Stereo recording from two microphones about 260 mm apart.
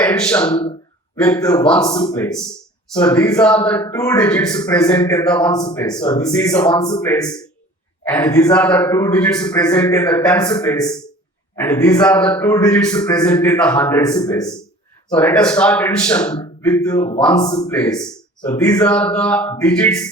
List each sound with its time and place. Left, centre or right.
0.0 s a man's voice: centre
5.5 s a man's voice: centre
5.7 s a man's voice: centre